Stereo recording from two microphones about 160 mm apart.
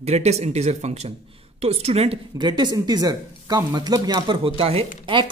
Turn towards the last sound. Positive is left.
turn(degrees=-35)  # may be behind; listen again after turning